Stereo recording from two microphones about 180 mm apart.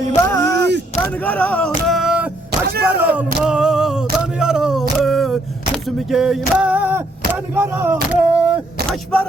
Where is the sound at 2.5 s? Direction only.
55° right (ahead or behind).